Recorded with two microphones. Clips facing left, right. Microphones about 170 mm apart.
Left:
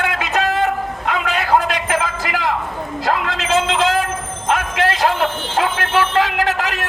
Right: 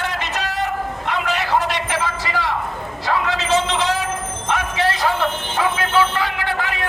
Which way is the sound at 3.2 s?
90° left.